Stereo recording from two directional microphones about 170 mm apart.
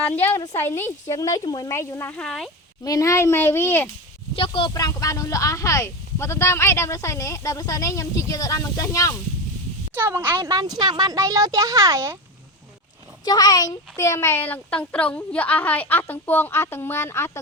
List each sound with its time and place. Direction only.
0.0 s a woman's voice: 10° left (ahead or behind)
2.8 s a woman's voice: 20° left (ahead or behind)
4.4 s speech: 30° left (ahead or behind)
4.7 s speech: 20° left (ahead or behind)
9.9 s speech: 10° right (ahead or behind)
13.2 s a woman's voice: 25° left (ahead or behind)